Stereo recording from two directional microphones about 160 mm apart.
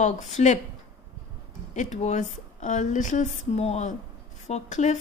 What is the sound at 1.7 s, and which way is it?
Speech, 45° left (ahead or behind).